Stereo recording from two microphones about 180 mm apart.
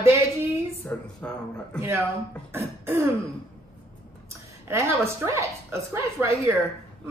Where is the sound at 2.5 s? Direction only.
10° right (ahead or behind).